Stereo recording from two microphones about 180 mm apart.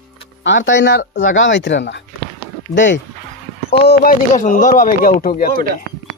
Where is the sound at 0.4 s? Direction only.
90° left; by 1.0 s 70° left (ahead or behind).